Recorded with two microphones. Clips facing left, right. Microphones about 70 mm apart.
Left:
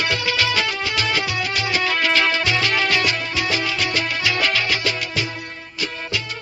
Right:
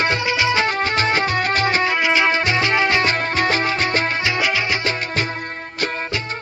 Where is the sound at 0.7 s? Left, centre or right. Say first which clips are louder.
Right 4 dB; right.